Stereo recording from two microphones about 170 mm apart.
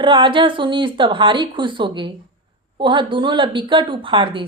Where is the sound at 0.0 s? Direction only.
30° right (ahead or behind).